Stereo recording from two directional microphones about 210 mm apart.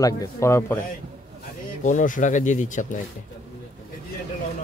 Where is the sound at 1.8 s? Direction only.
35° left (ahead or behind).